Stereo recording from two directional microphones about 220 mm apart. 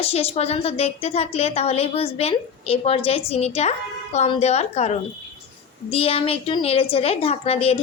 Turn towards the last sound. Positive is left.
turn(degrees=25)  # may be behind; listen again after turning